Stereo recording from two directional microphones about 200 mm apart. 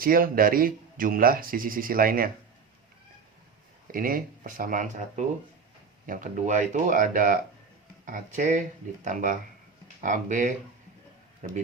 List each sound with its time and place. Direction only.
0.0 s speech: 45° right (ahead or behind)
3.9 s speech: 45° right (ahead or behind)